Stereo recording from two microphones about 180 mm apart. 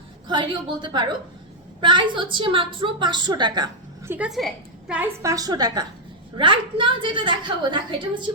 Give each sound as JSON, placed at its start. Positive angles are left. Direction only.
{"t": 0.3, "sound": "a woman's voice", "side_deg": -25}
{"t": 4.1, "sound": "a woman's voice", "side_deg": -5}
{"t": 5.2, "sound": "a woman's voice", "side_deg": -20}